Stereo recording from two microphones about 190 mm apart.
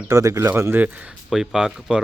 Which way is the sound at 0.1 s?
15° right (ahead or behind).